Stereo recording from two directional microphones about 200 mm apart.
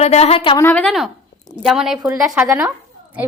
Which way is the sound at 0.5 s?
10° left (ahead or behind).